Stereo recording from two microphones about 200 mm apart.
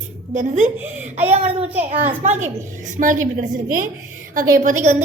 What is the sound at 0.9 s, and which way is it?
Speech, 35° right (ahead or behind).